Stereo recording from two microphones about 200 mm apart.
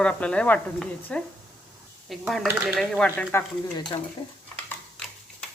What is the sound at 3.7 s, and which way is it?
Speech, 20° left (ahead or behind).